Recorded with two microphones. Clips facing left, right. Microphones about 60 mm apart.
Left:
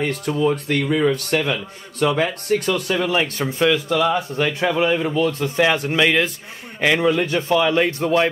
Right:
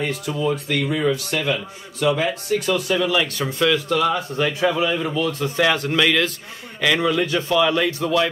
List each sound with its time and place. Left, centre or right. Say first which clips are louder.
0.0 s a man's voice: left 3 dB; left
4.4 s a man's voice: right 1 dB; left
5.6 s a man's voice: left 1 dB; left